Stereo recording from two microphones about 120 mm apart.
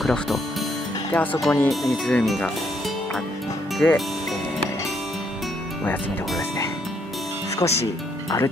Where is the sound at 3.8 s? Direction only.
15° left (ahead or behind).